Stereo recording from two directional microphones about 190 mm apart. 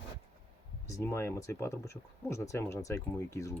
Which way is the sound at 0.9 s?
15° left (ahead or behind).